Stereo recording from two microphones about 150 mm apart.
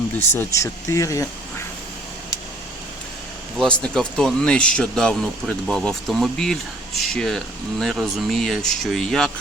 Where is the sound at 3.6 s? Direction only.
10° left (ahead or behind).